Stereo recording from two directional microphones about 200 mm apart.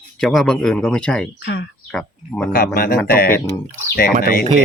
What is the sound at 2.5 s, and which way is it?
Speech, 50° left (ahead or behind).